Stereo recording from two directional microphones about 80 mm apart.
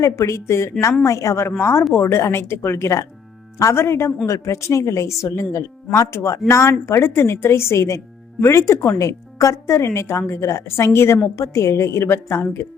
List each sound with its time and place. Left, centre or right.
0.0 s speech: left